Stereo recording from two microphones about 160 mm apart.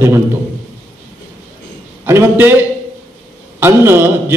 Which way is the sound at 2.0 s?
15° right (ahead or behind).